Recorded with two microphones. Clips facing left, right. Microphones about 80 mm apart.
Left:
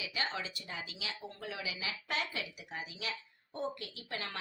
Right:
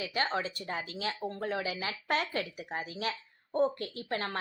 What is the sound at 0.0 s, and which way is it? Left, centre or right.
Speech, right.